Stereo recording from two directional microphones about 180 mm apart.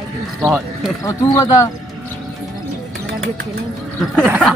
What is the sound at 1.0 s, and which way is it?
Speech, 15° left (ahead or behind).